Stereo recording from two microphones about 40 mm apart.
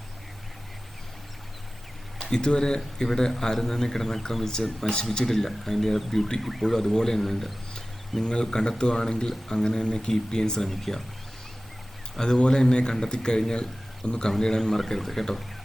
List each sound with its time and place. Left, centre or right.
2.3 s speech: centre
8.2 s a man's voice: left
10.6 s speech: centre
12.1 s a man's voice: centre
12.4 s a man's voice: centre